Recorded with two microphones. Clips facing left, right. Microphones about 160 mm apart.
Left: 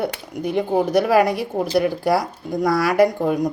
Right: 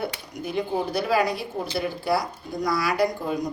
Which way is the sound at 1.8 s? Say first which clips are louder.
Left 5 dB; 90° left.